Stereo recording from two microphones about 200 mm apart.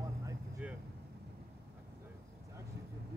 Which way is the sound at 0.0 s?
15° right (ahead or behind).